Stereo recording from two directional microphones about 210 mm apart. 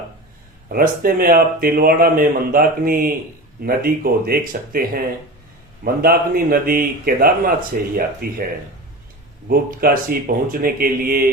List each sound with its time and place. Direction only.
0.7 s speech: 45° right (ahead or behind)
9.5 s speech: 40° right (ahead or behind)